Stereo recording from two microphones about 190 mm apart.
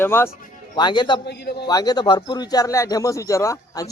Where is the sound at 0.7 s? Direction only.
25° left (ahead or behind).